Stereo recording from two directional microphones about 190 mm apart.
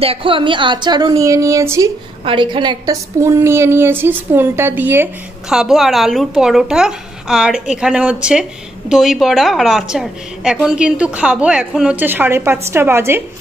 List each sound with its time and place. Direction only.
0.0 s a woman's voice: 30° right (ahead or behind)
2.2 s a woman's voice: 25° right (ahead or behind)